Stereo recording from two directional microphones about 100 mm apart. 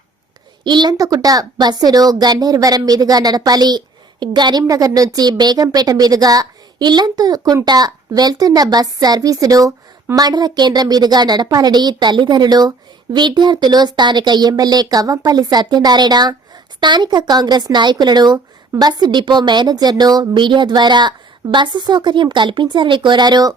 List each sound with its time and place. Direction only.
0.6 s speech: 50° right (ahead or behind)
4.6 s speech: 35° right (ahead or behind)